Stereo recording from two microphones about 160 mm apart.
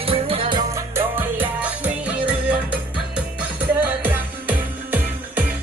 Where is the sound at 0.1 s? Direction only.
35° right (ahead or behind).